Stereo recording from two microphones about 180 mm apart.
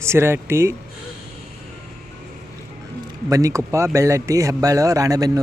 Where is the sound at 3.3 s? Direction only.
15° right (ahead or behind).